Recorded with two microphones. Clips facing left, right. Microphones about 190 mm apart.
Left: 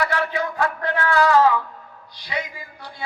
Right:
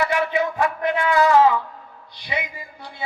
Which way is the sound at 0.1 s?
20° right (ahead or behind).